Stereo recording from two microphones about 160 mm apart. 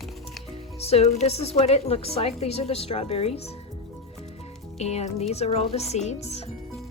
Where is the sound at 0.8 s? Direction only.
40° left (ahead or behind).